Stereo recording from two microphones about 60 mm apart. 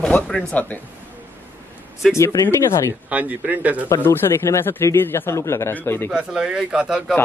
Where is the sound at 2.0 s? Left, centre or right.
Centre.